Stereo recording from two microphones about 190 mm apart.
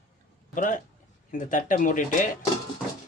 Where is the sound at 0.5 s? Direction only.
40° left (ahead or behind).